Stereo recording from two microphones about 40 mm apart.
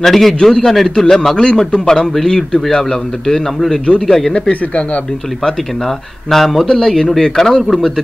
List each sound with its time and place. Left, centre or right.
0.0 s a man's voice: centre
4.3 s speech: left
5.9 s speech: centre
7.2 s a man's voice: centre